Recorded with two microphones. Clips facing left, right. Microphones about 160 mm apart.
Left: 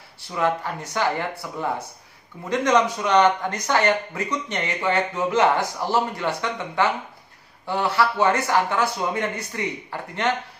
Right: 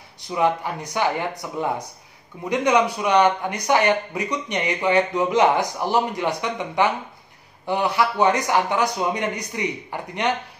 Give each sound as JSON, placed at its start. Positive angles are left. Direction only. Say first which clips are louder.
{"t": 0.2, "sound": "a man's voice", "louder": "right 2 dB", "side_deg": -15}